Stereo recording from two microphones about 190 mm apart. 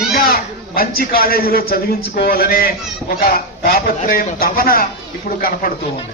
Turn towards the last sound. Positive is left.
turn(degrees=50)  # may be behind; listen again after turning